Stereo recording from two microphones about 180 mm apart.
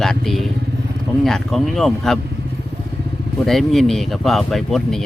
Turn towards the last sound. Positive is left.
turn(degrees=0)  # may be behind; listen again after turning